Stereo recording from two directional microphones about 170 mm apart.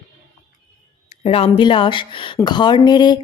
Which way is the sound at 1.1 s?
35° left (ahead or behind).